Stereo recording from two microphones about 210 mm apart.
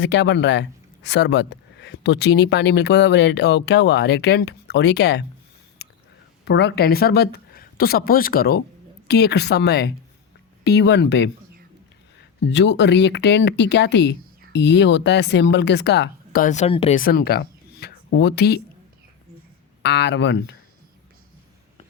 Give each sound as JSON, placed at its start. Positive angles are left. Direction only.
{"t": 0.0, "sound": "speech", "side_deg": 55}
{"t": 6.4, "sound": "speech", "side_deg": 55}
{"t": 12.4, "sound": "speech", "side_deg": 55}
{"t": 17.0, "sound": "speech", "side_deg": 45}
{"t": 19.8, "sound": "speech", "side_deg": 55}